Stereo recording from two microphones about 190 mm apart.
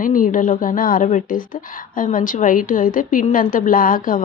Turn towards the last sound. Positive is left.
turn(degrees=45)  # may be behind; listen again after turning